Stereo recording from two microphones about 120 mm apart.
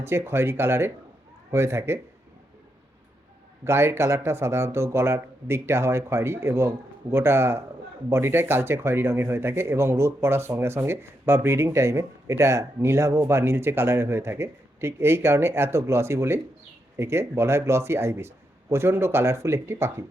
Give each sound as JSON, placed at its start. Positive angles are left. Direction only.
{"t": 0.0, "sound": "speech", "side_deg": -20}
{"t": 3.6, "sound": "speech", "side_deg": -20}